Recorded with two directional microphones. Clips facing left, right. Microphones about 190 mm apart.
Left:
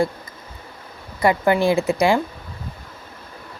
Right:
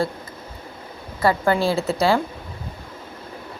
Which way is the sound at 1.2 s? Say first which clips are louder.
Left 2 dB; 15° left (ahead or behind).